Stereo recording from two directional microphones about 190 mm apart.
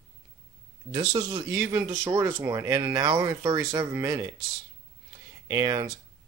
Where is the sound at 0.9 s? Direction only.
20° right (ahead or behind).